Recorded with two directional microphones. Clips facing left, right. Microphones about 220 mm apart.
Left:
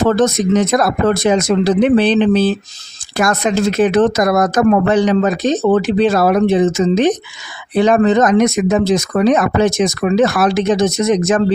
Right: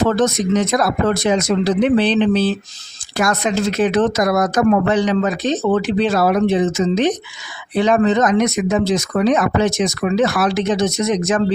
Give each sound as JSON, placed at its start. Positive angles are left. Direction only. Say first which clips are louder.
{"t": 0.0, "sound": "speech", "louder": "left 3 dB", "side_deg": 50}